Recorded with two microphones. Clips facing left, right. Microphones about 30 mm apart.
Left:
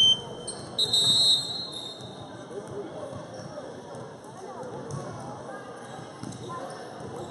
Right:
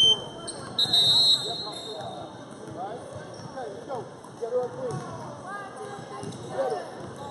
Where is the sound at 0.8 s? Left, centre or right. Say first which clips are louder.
Right 2 dB; centre.